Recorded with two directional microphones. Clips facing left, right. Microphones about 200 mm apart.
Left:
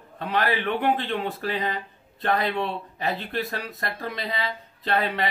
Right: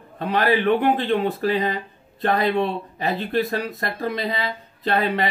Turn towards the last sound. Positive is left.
turn(degrees=-40)  # may be behind; listen again after turning